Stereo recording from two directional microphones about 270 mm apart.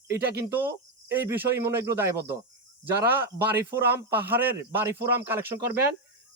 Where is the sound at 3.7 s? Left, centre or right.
Right.